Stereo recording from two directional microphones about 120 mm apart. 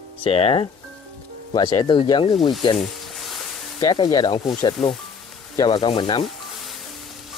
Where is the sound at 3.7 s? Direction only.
35° left (ahead or behind).